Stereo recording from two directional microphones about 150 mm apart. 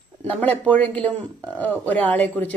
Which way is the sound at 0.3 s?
10° left (ahead or behind).